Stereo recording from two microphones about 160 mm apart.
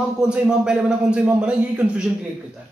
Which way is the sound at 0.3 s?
5° right (ahead or behind).